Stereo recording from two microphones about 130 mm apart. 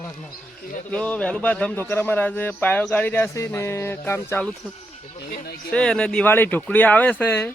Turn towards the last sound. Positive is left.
turn(degrees=15)  # may be behind; listen again after turning